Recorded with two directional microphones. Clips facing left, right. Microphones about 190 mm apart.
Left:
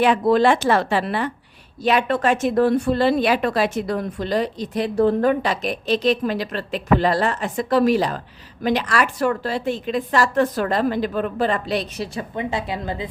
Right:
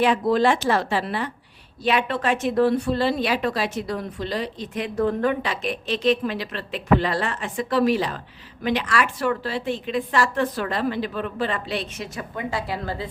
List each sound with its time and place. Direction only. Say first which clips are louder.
0.0 s speech: left 3 dB; 60° left (ahead or behind)
1.8 s speech: left 4 dB; 45° left (ahead or behind)
12.4 s speech: left 2 dB; 20° left (ahead or behind)